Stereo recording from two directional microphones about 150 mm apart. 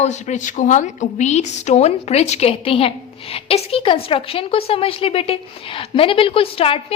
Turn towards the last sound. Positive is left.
turn(degrees=40)  # may be behind; listen again after turning